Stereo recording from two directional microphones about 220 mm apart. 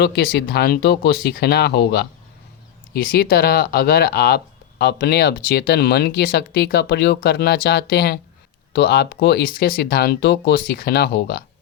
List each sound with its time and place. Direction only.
0.0 s speech: 50° left (ahead or behind)